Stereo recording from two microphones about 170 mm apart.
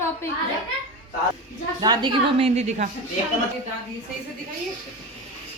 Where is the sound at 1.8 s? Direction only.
25° right (ahead or behind); by 2.9 s 45° right (ahead or behind).